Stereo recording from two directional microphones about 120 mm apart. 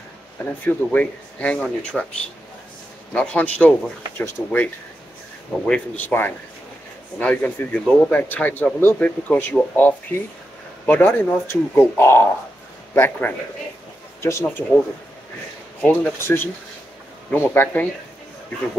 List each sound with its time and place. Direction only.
0.7 s a man's voice: 10° left (ahead or behind)
3.1 s a man's voice: 10° left (ahead or behind)
15.8 s a man's voice: 15° left (ahead or behind)